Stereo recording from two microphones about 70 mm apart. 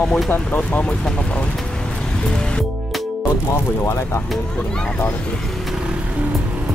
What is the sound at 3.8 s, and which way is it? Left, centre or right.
Speech, left.